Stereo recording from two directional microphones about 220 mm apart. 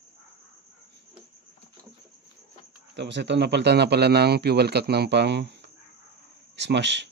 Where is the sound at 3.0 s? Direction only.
50° right (ahead or behind).